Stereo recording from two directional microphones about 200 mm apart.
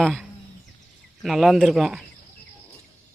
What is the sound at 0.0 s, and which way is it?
Speech, centre (ahead or behind).